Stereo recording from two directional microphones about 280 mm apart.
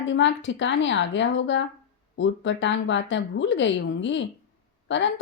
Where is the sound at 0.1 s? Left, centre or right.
Left.